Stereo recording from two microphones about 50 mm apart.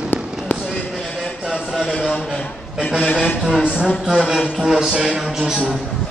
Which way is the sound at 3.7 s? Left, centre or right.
Centre.